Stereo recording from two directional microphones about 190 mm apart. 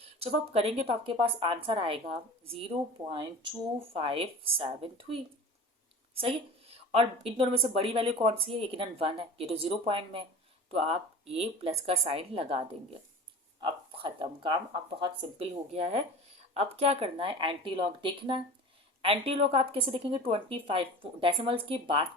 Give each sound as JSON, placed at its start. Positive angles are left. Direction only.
{"t": 0.0, "sound": "a woman's voice", "side_deg": -30}